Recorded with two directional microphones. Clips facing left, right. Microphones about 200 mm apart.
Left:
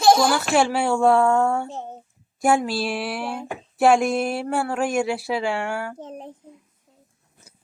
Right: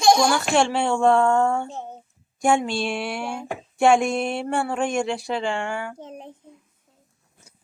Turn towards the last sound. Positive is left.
turn(degrees=5)  # may be behind; listen again after turning